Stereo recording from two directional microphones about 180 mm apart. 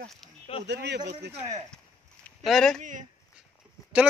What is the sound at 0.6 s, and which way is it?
Speech, 70° right (ahead or behind).